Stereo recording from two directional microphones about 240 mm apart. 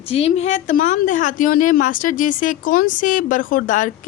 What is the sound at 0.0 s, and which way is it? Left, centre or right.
A woman's voice, left.